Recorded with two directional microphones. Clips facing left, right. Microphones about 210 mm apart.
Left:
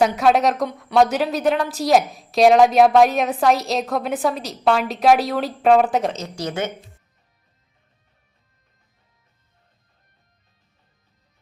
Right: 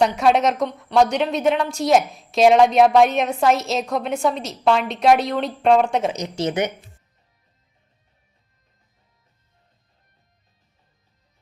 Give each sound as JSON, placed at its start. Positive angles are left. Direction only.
{"t": 0.0, "sound": "a woman's voice", "side_deg": 0}
{"t": 6.1, "sound": "a woman's voice", "side_deg": -20}